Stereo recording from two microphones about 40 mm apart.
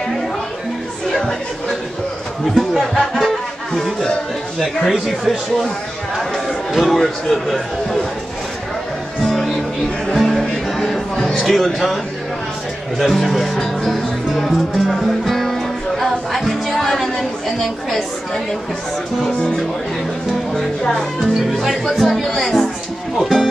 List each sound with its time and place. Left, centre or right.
3.2 s music: centre
4.6 s speech: centre
6.7 s a man's voice: centre
10.1 s music: centre
11.3 s speech: centre
13.0 s music: centre
16.8 s a sound: centre
21.2 s speech: centre
21.9 s a man's voice: centre
23.1 s speech: centre